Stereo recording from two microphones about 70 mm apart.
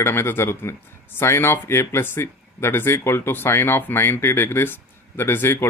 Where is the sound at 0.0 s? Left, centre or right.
Left.